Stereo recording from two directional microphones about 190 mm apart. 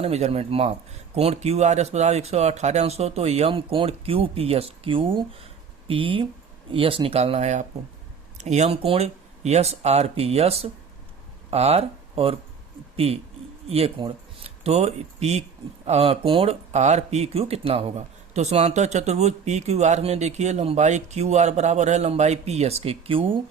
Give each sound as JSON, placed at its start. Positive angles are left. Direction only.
{"t": 0.0, "sound": "speech", "side_deg": -35}